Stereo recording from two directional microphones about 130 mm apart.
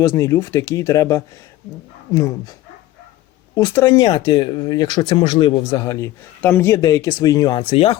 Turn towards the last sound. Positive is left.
turn(degrees=45)  # may be behind; listen again after turning